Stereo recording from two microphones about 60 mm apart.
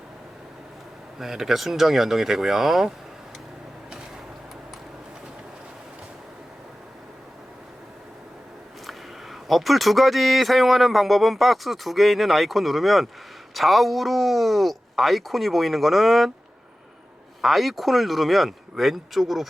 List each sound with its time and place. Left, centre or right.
1.2 s speech: centre
8.9 s speech: centre
17.4 s speech: centre